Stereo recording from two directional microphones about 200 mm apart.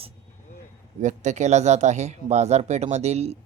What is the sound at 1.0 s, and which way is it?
Speech, 35° right (ahead or behind).